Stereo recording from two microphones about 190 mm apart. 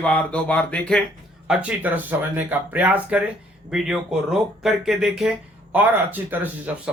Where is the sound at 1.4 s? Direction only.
5° right (ahead or behind).